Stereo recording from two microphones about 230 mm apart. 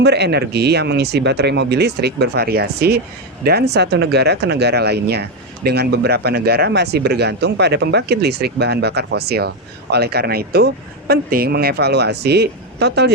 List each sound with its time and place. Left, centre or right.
0.0 s speech: right